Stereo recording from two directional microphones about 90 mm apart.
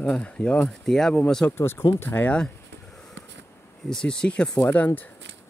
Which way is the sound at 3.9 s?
10° left (ahead or behind).